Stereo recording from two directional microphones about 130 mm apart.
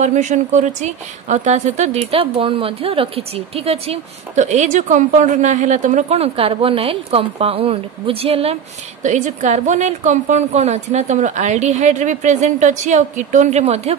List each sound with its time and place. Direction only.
0.0 s speech: 70° right (ahead or behind); by 8.5 s 50° right (ahead or behind)
9.0 s a woman's voice: 70° right (ahead or behind)